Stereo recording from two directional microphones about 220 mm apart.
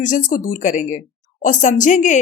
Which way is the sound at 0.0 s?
35° left (ahead or behind).